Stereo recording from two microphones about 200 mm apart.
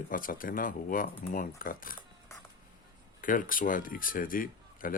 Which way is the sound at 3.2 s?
45° left (ahead or behind).